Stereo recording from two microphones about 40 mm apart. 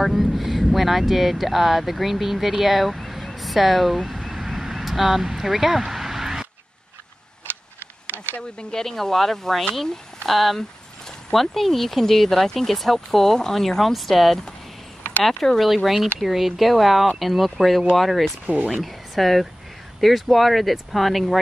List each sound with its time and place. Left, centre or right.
0.0 s speech: centre
8.4 s speech: centre